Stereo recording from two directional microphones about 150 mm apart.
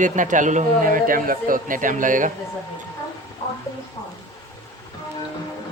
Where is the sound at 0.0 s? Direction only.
60° right (ahead or behind).